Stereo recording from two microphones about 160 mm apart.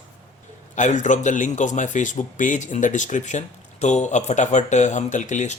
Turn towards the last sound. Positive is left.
turn(degrees=50)  # may be behind; listen again after turning